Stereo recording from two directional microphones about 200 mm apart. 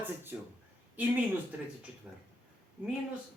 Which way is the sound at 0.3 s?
5° right (ahead or behind).